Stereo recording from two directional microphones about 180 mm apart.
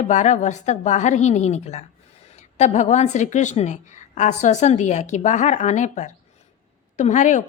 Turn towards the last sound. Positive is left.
turn(degrees=45)  # may be behind; listen again after turning